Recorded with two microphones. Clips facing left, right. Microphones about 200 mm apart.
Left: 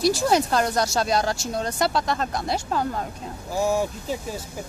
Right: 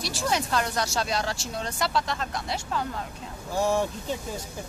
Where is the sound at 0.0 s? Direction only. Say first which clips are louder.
Left 8 dB; 40° left (ahead or behind).